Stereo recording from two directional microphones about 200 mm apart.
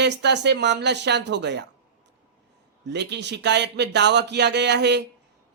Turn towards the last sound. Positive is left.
turn(degrees=-60)  # may be behind; listen again after turning